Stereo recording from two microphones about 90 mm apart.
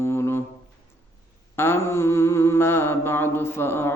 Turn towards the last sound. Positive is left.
turn(degrees=25)  # may be behind; listen again after turning